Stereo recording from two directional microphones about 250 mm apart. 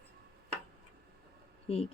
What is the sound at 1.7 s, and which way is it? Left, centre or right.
Speech, left.